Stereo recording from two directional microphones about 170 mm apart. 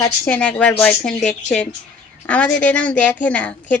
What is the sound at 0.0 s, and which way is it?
Speech, 10° left (ahead or behind).